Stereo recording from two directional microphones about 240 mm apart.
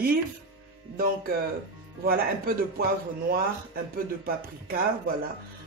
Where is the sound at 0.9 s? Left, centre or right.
Right.